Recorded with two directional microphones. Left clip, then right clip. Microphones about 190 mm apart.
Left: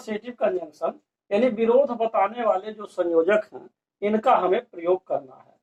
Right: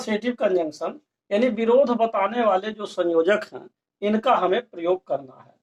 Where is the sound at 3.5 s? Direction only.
45° right (ahead or behind).